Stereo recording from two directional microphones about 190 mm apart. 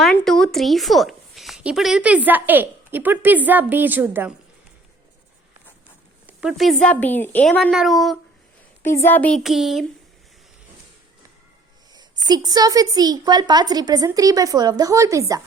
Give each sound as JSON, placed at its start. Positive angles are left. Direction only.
{"t": 0.0, "sound": "a woman's voice", "side_deg": 0}
{"t": 6.2, "sound": "a woman's voice", "side_deg": -5}
{"t": 8.8, "sound": "a woman's voice", "side_deg": 10}
{"t": 11.9, "sound": "a woman's voice", "side_deg": -20}